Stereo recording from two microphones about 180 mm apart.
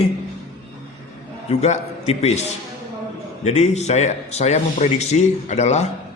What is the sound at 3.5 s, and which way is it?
Speech, 40° left (ahead or behind).